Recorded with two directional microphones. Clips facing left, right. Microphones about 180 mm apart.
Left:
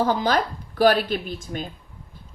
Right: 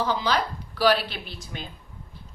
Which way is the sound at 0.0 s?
50° left (ahead or behind).